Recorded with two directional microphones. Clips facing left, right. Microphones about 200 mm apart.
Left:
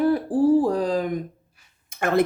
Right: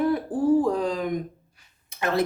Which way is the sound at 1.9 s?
50° left (ahead or behind).